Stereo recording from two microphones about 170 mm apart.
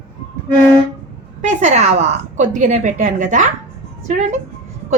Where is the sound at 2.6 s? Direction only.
45° right (ahead or behind).